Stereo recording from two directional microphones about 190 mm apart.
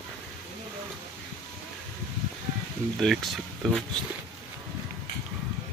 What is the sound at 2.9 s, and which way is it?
Speech, centre (ahead or behind).